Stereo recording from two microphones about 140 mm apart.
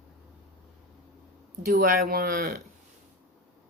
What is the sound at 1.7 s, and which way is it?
Speech, 90° right.